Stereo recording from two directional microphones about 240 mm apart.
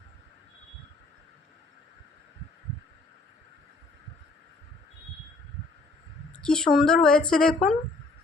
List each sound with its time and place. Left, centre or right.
6.3 s speech: centre